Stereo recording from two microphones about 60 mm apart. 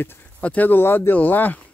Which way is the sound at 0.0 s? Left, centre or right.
Left.